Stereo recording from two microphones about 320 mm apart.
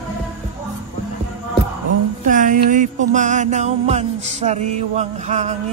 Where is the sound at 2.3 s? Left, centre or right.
Right.